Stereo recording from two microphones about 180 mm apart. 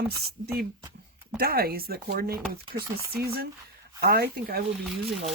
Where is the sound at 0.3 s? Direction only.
60° right (ahead or behind).